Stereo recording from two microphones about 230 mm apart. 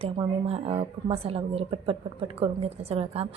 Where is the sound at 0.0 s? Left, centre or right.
Right.